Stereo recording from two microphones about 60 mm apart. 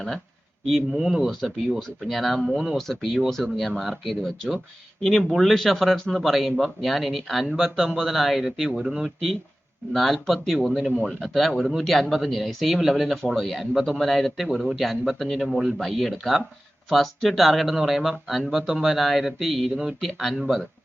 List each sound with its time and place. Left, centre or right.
0.9 s speech: centre